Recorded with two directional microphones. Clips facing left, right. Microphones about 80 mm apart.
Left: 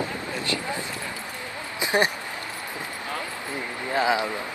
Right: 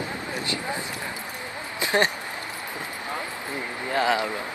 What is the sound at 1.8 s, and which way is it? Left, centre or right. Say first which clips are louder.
Speech: even; left.